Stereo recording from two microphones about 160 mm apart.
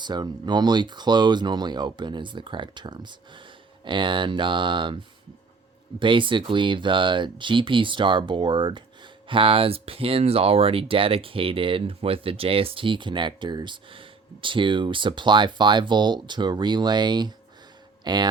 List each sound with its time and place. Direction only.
0.0 s speech: 25° right (ahead or behind)
6.0 s speech: 30° right (ahead or behind)